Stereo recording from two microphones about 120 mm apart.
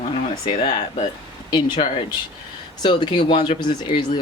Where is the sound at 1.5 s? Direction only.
40° left (ahead or behind).